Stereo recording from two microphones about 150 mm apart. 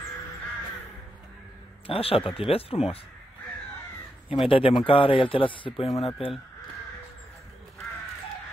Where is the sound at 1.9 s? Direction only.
40° left (ahead or behind).